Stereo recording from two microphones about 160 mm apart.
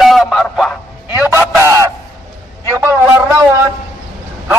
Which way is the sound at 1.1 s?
15° right (ahead or behind).